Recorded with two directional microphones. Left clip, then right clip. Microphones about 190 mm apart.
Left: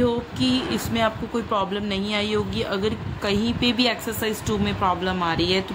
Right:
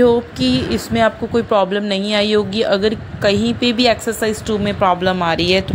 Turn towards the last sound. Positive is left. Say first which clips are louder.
# right 7 dB
turn(degrees=-30)  # may be behind; listen again after turning